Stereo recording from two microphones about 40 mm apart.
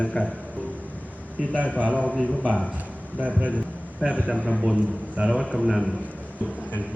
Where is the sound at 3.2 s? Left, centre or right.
Right.